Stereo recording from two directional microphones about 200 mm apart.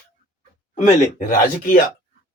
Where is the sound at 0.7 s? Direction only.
40° left (ahead or behind).